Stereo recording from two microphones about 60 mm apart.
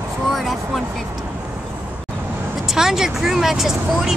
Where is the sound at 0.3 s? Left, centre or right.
Centre.